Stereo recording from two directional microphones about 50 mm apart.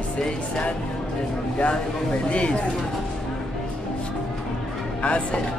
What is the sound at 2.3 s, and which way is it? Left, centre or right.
Speech, left.